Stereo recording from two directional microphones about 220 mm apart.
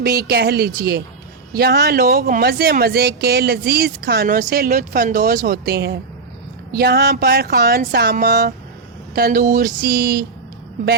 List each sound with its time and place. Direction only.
0.0 s speech: 45° right (ahead or behind)